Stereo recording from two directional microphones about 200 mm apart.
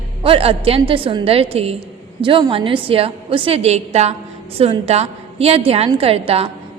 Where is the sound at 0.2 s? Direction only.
25° right (ahead or behind).